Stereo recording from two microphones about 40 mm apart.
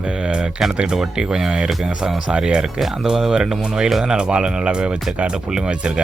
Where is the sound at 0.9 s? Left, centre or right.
Centre.